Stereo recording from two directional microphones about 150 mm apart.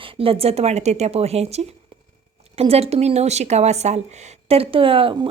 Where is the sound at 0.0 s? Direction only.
40° right (ahead or behind).